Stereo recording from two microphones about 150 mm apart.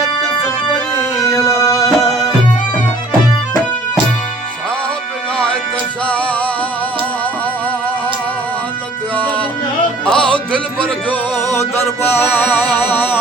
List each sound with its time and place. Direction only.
0.9 s music: 20° left (ahead or behind)
6.1 s music: 10° left (ahead or behind)
10.1 s music: 5° left (ahead or behind)